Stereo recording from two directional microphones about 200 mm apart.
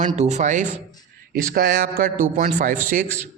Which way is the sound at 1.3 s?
55° right (ahead or behind).